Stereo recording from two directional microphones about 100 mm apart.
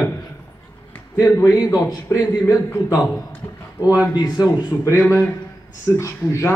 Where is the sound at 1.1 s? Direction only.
25° left (ahead or behind).